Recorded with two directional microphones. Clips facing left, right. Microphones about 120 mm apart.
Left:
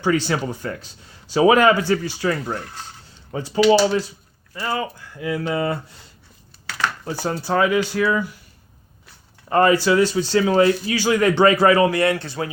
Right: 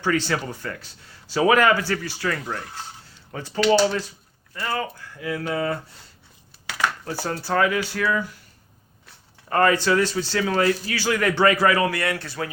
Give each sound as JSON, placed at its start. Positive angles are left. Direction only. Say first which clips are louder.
{"t": 0.0, "sound": "speech", "louder": "left 3 dB", "side_deg": 15}
{"t": 7.0, "sound": "speech", "louder": "left 3 dB", "side_deg": 15}
{"t": 9.5, "sound": "speech", "louder": "left 3 dB", "side_deg": 20}